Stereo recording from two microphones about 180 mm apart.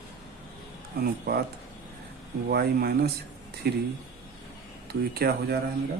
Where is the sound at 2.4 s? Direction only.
60° right (ahead or behind).